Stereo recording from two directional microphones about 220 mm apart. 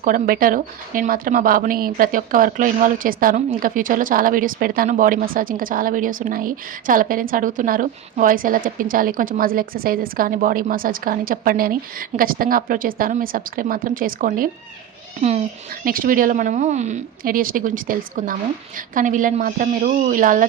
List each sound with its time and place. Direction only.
0.0 s a woman's voice: 40° right (ahead or behind)